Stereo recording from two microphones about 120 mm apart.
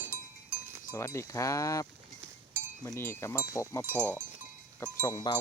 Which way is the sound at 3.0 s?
20° left (ahead or behind).